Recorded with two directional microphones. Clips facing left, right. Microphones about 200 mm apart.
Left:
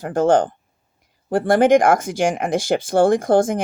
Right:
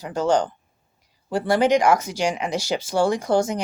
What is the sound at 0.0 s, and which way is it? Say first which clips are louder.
Speech: left 5 dB; 50° left (ahead or behind).